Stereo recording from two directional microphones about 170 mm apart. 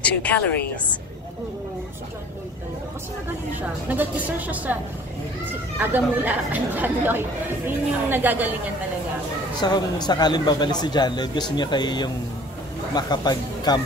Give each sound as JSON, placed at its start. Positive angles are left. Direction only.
{"t": 0.0, "sound": "a woman's voice", "side_deg": 10}
{"t": 3.9, "sound": "speech", "side_deg": -10}
{"t": 5.8, "sound": "speech", "side_deg": -10}
{"t": 9.6, "sound": "speech", "side_deg": 25}